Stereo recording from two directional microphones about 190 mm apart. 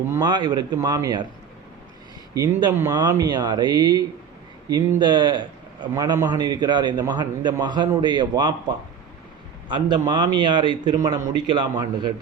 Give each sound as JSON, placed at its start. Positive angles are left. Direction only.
{"t": 0.1, "sound": "a man's voice", "side_deg": -20}
{"t": 2.3, "sound": "a man's voice", "side_deg": -20}